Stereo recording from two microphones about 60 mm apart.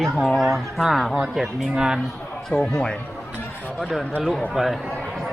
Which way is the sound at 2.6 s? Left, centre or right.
Centre.